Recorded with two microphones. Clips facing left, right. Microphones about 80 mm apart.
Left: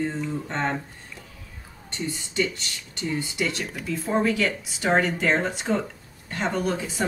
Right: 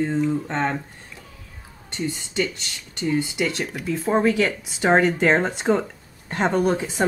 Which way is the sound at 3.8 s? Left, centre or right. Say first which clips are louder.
Right 4 dB; right.